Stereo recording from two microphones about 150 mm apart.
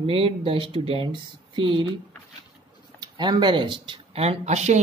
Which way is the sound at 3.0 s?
30° right (ahead or behind).